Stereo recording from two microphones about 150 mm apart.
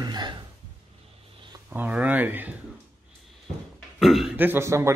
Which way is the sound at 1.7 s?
10° right (ahead or behind).